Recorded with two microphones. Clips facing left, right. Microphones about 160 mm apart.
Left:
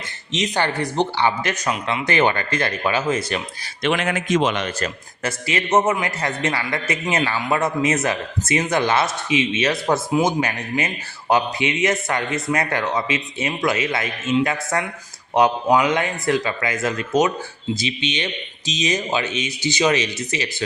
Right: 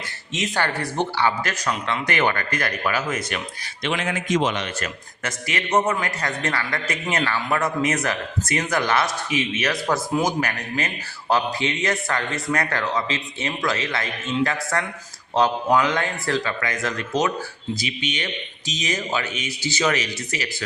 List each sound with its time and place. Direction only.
0.3 s a man's voice: 20° left (ahead or behind)
3.8 s a man's voice: 65° left (ahead or behind)
4.6 s a man's voice: 35° left (ahead or behind)
15.4 s a man's voice: 15° left (ahead or behind)